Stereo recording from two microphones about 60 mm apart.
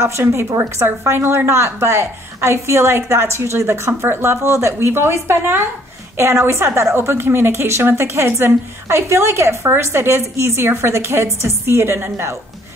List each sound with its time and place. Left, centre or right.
0.0 s a woman's voice: right